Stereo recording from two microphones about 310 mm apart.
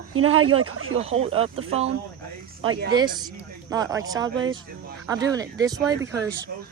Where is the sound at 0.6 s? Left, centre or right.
Right.